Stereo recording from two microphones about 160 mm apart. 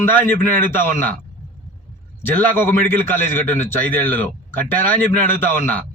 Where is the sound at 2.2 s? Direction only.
10° left (ahead or behind).